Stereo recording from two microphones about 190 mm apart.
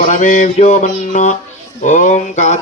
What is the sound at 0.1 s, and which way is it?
Speech, 40° left (ahead or behind).